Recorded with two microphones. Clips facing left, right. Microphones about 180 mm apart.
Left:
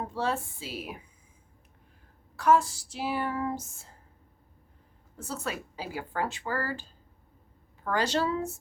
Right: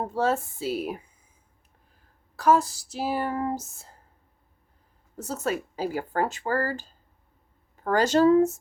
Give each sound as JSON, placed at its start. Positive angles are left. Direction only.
{"t": 0.0, "sound": "speech", "side_deg": -45}
{"t": 2.3, "sound": "speech", "side_deg": -35}
{"t": 5.1, "sound": "speech", "side_deg": -40}
{"t": 7.9, "sound": "speech", "side_deg": -45}